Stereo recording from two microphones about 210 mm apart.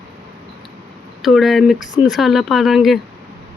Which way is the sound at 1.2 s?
Centre (ahead or behind).